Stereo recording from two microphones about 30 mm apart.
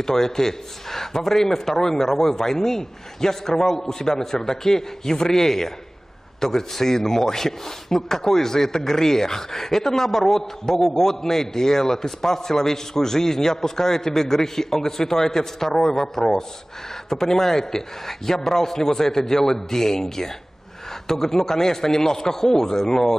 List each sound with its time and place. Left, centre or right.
0.0 s speech: centre
6.7 s speech: centre